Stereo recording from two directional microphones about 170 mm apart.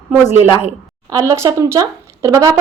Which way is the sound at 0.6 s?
20° right (ahead or behind).